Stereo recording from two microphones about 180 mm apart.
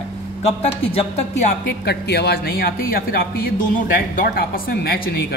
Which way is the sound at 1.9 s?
65° left (ahead or behind).